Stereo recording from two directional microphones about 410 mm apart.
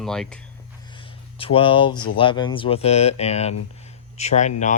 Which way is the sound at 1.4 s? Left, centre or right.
Centre.